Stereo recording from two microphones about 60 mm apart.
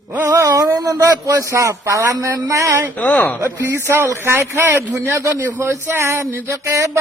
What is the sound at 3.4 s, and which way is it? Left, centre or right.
A man's voice, right.